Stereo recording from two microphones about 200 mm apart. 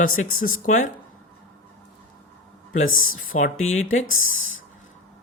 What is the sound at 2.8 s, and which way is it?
Speech, 90° left.